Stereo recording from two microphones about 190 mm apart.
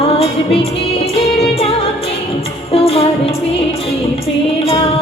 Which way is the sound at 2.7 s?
30° left (ahead or behind).